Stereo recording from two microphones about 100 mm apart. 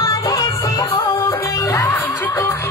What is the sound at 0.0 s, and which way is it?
Music, 40° left (ahead or behind).